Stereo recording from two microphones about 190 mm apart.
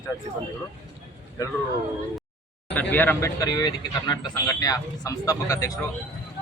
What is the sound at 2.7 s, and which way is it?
Speech, 10° left (ahead or behind).